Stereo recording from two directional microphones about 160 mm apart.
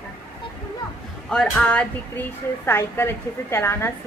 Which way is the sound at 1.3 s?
5° left (ahead or behind).